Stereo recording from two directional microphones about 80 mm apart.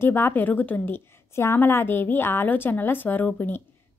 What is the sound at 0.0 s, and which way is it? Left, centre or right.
A woman's voice, left.